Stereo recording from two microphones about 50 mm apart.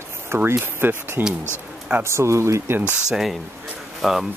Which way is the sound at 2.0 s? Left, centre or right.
Right.